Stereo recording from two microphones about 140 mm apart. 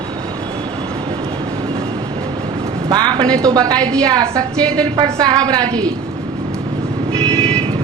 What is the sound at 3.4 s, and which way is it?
A woman's voice, 25° right (ahead or behind).